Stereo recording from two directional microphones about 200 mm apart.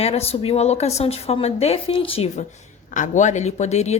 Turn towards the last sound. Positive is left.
turn(degrees=35)  # may be behind; listen again after turning